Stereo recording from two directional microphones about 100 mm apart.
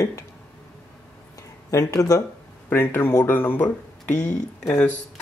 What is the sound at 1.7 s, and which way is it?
Speech, 35° left (ahead or behind).